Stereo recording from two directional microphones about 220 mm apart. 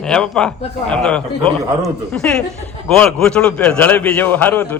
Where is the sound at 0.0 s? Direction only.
5° left (ahead or behind).